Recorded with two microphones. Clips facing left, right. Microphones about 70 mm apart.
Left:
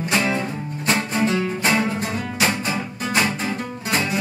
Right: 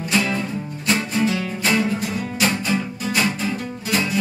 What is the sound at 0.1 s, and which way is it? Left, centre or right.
Music, left.